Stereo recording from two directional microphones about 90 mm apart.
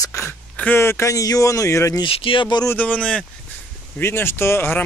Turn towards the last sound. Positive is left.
turn(degrees=25)  # may be behind; listen again after turning